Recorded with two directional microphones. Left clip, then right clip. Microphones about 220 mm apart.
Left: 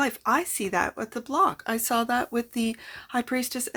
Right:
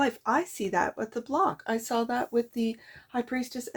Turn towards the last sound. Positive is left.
turn(degrees=25)  # may be behind; listen again after turning